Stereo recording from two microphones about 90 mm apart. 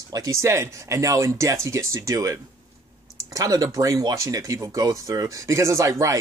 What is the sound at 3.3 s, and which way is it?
Speech, 40° right (ahead or behind).